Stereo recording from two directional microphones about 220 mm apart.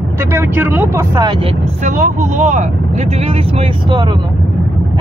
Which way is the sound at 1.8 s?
35° right (ahead or behind).